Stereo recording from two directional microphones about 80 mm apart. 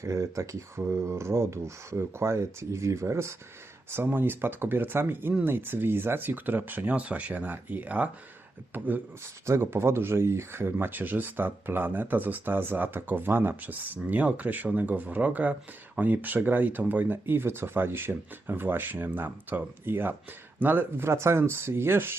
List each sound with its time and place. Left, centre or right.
0.0 s speech: right
3.9 s speech: right